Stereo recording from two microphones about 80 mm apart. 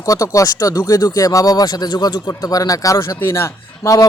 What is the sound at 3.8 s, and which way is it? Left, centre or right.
Speech, left.